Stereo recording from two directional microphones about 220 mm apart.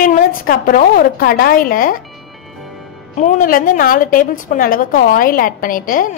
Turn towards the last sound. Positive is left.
turn(degrees=40)  # may be behind; listen again after turning